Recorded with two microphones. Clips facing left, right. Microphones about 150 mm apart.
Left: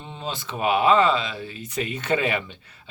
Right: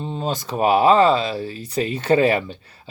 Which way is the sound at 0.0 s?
40° right (ahead or behind).